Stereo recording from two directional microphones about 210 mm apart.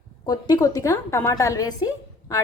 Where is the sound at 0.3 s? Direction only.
20° left (ahead or behind).